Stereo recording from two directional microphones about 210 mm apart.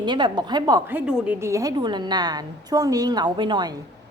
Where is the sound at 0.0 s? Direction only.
20° right (ahead or behind).